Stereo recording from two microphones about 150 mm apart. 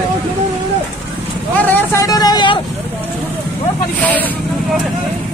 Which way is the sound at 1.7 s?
20° left (ahead or behind).